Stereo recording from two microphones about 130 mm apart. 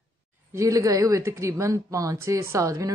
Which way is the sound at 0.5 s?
25° right (ahead or behind).